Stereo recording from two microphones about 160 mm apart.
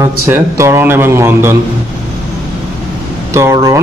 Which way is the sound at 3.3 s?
20° right (ahead or behind).